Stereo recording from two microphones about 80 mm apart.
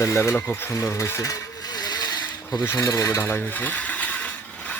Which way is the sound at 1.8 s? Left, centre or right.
Left.